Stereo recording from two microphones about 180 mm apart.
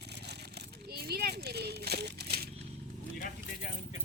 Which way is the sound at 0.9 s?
60° right (ahead or behind).